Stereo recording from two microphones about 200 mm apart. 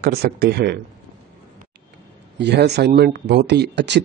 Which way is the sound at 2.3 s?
60° right (ahead or behind).